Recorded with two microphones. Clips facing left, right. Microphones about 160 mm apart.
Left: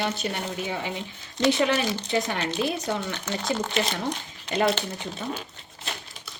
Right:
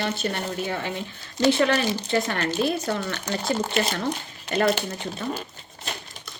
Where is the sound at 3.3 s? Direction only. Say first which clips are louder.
Right 2 dB; 35° right (ahead or behind).